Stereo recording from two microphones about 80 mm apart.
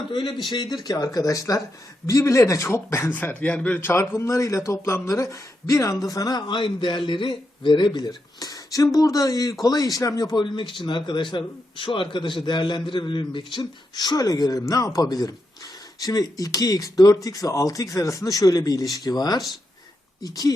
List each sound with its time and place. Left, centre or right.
0.1 s a man's voice: left
0.5 s a man's voice: left
3.1 s speech: left
3.8 s speech: left
6.5 s a man's voice: left
10.4 s a man's voice: left